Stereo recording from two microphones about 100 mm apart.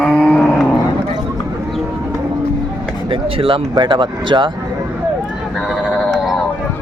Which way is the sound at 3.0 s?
65° right (ahead or behind).